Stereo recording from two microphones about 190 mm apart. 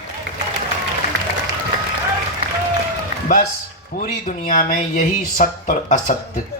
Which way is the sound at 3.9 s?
40° left (ahead or behind).